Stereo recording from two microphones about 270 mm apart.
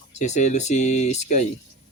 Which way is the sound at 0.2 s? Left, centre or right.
Left.